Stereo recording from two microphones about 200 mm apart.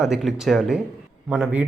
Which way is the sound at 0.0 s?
Centre (ahead or behind).